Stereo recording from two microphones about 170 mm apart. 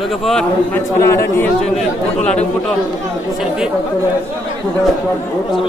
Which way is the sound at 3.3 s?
5° right (ahead or behind).